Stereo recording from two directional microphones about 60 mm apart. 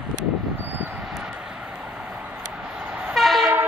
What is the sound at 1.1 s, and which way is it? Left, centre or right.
Vehicle, centre.